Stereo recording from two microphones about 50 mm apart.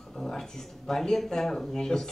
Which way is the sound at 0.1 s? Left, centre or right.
Centre.